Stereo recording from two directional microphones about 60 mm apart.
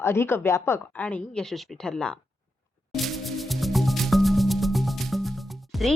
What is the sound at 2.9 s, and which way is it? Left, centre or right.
Music, centre.